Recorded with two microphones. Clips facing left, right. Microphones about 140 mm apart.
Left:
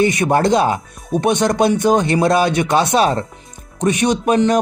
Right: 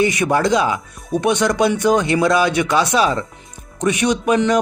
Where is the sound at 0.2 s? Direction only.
50° left (ahead or behind).